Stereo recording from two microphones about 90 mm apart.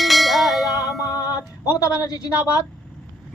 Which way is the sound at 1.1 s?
45° left (ahead or behind).